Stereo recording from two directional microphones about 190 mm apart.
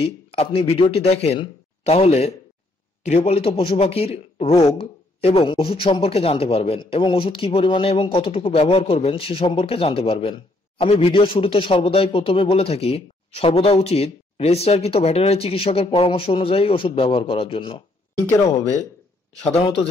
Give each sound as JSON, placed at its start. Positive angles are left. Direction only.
{"t": 0.0, "sound": "speech", "side_deg": 30}
{"t": 18.2, "sound": "speech", "side_deg": 15}